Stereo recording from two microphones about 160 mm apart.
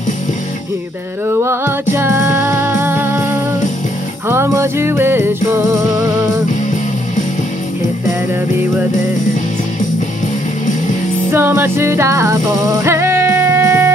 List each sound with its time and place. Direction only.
1.4 s music: 15° right (ahead or behind)
4.3 s music: 15° right (ahead or behind)
11.3 s music: 15° right (ahead or behind)